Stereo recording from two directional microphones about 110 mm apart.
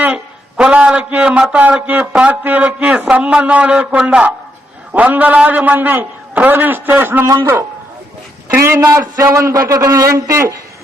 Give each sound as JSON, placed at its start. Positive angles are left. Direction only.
{"t": 0.0, "sound": "a man's voice", "side_deg": -10}
{"t": 7.3, "sound": "a man's voice", "side_deg": -30}